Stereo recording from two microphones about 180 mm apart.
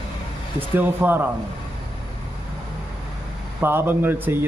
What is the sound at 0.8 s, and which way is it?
Speech, 10° right (ahead or behind).